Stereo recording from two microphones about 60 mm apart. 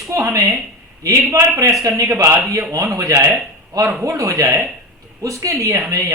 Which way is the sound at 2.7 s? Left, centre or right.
Right.